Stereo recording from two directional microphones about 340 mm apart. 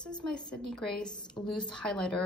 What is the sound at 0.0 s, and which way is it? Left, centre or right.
A woman's voice, centre.